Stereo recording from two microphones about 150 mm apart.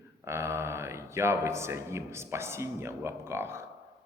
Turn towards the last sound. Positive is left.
turn(degrees=-15)  # may be behind; listen again after turning